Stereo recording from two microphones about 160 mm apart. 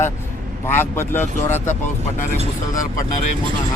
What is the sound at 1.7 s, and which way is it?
Speech, 50° left (ahead or behind).